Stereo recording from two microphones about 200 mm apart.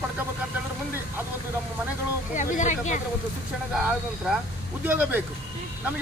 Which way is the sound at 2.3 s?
40° left (ahead or behind).